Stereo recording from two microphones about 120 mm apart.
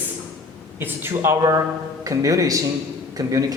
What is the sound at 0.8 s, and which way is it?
Speech, 15° right (ahead or behind).